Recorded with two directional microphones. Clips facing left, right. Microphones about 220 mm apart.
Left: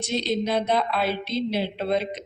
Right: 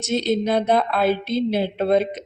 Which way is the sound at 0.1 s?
50° right (ahead or behind).